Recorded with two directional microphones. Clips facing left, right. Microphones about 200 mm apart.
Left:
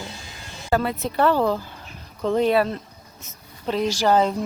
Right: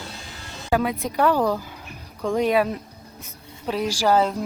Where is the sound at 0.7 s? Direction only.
10° right (ahead or behind).